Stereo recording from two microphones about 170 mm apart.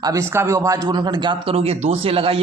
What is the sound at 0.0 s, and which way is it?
Speech, 20° right (ahead or behind).